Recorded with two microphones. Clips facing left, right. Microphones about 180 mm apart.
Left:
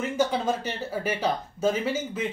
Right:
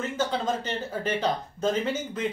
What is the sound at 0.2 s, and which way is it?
Speech, 10° left (ahead or behind).